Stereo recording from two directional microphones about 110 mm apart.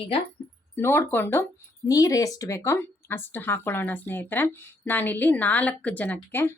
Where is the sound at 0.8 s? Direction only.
20° left (ahead or behind).